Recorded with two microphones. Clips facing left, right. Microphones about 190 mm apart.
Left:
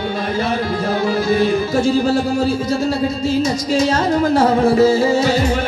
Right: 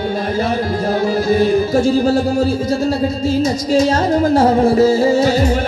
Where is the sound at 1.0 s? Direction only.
40° right (ahead or behind).